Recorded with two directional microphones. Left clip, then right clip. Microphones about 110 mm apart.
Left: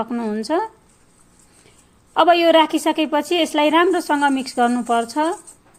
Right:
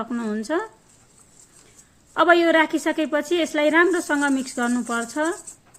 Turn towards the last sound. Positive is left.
turn(degrees=35)  # may be behind; listen again after turning